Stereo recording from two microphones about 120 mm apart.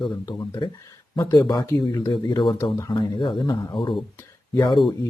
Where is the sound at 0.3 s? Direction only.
35° left (ahead or behind).